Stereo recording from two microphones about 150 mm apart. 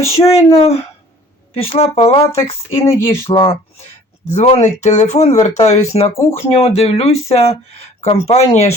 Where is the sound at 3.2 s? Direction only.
35° left (ahead or behind).